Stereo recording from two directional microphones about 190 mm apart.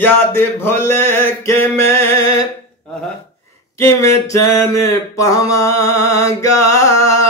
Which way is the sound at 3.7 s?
15° left (ahead or behind).